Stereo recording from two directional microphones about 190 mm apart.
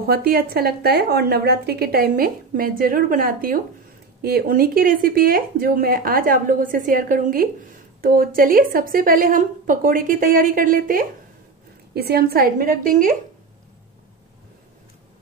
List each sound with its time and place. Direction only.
0.0 s a woman's voice: 55° right (ahead or behind)